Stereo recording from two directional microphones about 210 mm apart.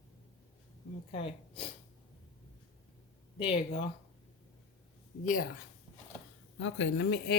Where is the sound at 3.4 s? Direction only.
25° left (ahead or behind).